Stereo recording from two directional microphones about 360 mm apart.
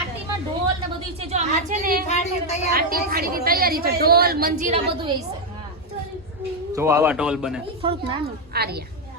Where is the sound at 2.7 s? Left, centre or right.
Right.